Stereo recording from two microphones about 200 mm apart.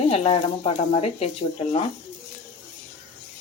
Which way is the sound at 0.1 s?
30° left (ahead or behind).